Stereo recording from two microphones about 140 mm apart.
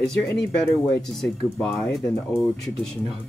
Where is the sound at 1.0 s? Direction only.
5° left (ahead or behind).